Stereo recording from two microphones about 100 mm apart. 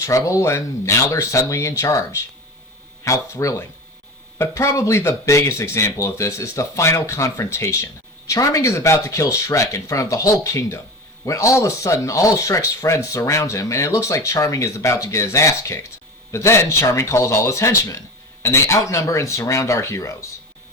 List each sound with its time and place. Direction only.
0.0 s speech: 30° left (ahead or behind)